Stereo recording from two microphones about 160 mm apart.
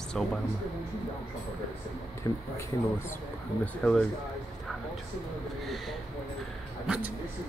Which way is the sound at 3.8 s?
10° left (ahead or behind).